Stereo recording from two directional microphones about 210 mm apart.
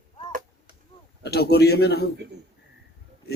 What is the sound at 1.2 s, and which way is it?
Speech, 50° left (ahead or behind).